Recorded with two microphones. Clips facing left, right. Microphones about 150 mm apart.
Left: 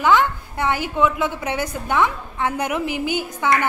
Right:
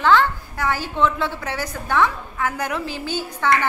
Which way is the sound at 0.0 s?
15° left (ahead or behind).